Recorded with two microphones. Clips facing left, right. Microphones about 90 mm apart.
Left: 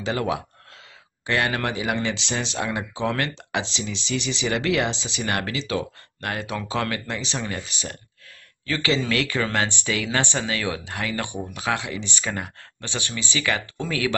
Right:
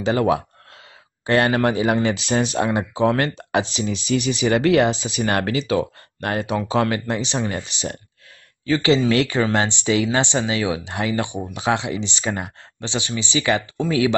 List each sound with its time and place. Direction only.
0.0 s speech: 35° right (ahead or behind)
8.6 s speech: 25° right (ahead or behind)